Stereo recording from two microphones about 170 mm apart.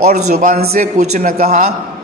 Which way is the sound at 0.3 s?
60° right (ahead or behind).